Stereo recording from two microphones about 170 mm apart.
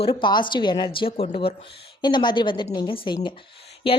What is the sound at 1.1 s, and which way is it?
Speech, 45° left (ahead or behind).